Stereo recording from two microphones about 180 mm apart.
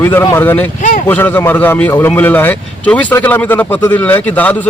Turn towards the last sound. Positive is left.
turn(degrees=10)  # may be behind; listen again after turning